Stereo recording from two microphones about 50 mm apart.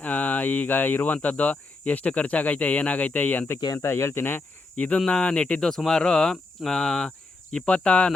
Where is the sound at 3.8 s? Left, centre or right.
Left.